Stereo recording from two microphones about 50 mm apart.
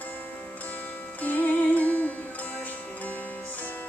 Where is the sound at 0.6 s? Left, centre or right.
Left.